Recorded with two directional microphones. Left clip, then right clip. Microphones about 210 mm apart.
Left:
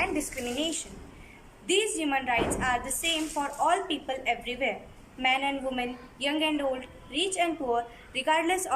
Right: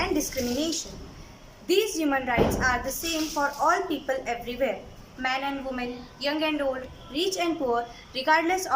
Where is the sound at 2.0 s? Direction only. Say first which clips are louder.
Right 3 dB; centre (ahead or behind).